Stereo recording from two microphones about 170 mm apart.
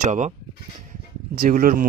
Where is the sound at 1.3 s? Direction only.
55° right (ahead or behind).